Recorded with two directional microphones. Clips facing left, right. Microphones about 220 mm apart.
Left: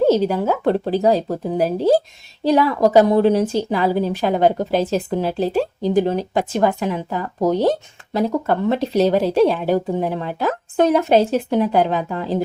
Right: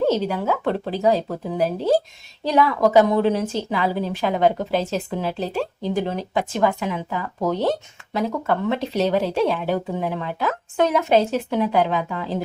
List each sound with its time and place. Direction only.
0.1 s a woman's voice: 40° left (ahead or behind)